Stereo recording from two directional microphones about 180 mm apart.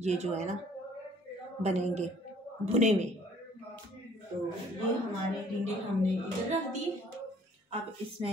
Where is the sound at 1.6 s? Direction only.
40° right (ahead or behind).